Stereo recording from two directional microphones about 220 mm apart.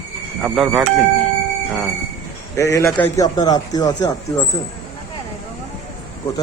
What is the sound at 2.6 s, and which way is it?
Speech, 15° left (ahead or behind).